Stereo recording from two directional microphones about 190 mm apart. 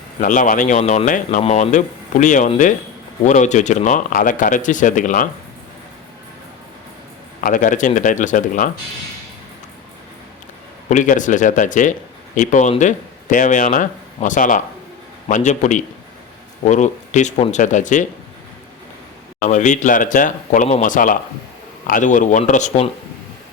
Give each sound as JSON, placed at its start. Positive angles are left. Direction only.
{"t": 0.2, "sound": "speech", "side_deg": 45}
{"t": 7.4, "sound": "speech", "side_deg": 45}
{"t": 10.8, "sound": "speech", "side_deg": 40}
{"t": 19.5, "sound": "speech", "side_deg": 40}